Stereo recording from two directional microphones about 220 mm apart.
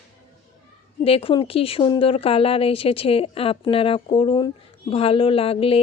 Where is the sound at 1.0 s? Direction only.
25° left (ahead or behind).